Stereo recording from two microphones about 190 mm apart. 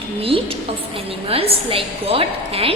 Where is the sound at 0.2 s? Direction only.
30° right (ahead or behind).